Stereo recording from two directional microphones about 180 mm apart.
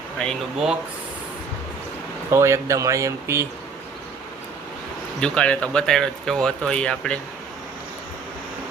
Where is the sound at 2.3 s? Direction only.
15° right (ahead or behind).